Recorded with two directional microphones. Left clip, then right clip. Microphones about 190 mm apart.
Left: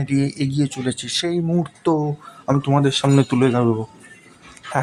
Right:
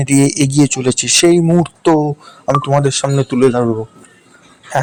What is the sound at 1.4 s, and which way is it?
Speech, 25° right (ahead or behind).